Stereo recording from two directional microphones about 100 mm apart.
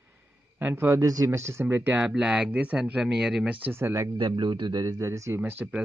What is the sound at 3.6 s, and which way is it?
Speech, 25° right (ahead or behind).